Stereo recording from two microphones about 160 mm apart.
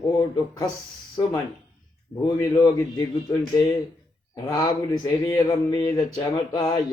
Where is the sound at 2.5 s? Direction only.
25° left (ahead or behind).